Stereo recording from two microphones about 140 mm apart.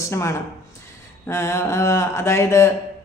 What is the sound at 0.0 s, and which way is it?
A woman's voice, 20° left (ahead or behind).